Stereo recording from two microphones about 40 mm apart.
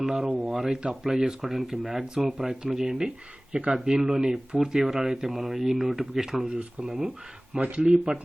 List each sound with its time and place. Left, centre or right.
0.0 s speech: centre
3.5 s speech: right
3.8 s speech: centre